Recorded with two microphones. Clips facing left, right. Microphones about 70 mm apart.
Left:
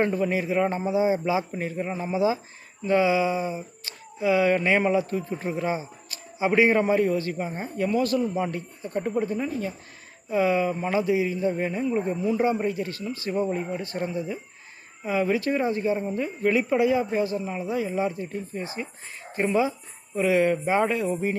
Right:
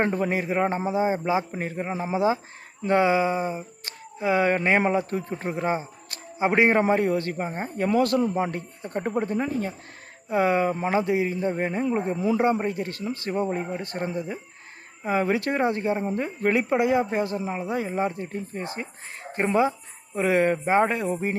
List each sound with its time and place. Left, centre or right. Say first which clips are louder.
0.0 s a man's voice: even; right
7.9 s a man's voice: right 3 dB; right
11.9 s speech: even; right
12.6 s a man's voice: even; right